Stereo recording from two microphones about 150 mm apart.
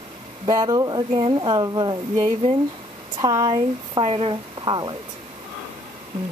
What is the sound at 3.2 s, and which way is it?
Speech, 25° right (ahead or behind).